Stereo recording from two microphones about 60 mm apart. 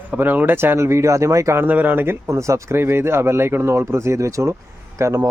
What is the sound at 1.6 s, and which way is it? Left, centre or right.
Speech, right.